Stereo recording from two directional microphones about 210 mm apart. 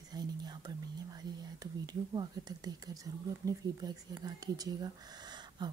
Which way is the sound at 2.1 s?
20° right (ahead or behind).